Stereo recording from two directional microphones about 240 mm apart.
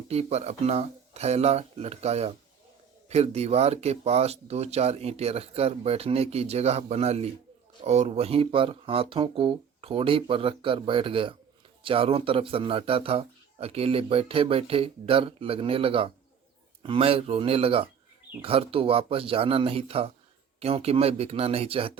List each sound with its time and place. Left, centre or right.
0.1 s a man's voice: right